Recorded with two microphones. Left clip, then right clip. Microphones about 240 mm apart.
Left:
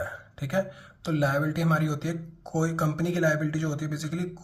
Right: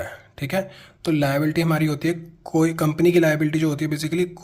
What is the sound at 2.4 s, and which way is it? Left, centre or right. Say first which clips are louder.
Speech: right 9 dB; right.